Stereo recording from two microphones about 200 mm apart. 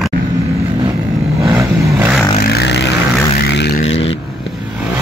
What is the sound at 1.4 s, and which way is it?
Vehicle, 15° right (ahead or behind).